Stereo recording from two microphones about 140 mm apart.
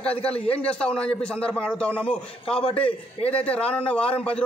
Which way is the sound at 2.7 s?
45° left (ahead or behind).